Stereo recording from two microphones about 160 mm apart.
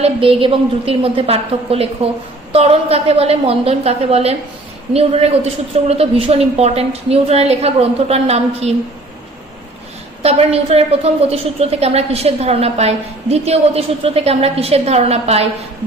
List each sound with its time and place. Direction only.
0.0 s a woman's voice: 35° right (ahead or behind)
10.2 s a woman's voice: 40° right (ahead or behind)